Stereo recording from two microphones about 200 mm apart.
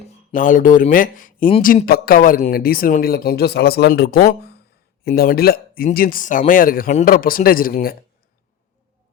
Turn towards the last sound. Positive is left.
turn(degrees=45)  # may be behind; listen again after turning